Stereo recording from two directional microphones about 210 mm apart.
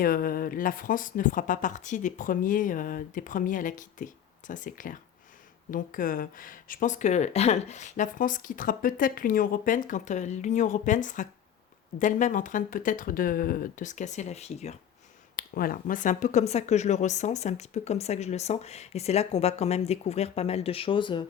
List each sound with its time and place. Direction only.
0.0 s speech: 45° left (ahead or behind)
15.4 s speech: 45° left (ahead or behind); by 21.2 s 20° left (ahead or behind)